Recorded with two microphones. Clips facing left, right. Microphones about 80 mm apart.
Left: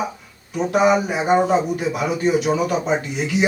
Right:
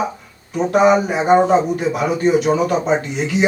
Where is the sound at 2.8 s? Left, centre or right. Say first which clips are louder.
Right 3 dB; right.